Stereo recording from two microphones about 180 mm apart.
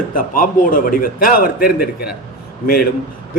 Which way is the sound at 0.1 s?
50° left (ahead or behind).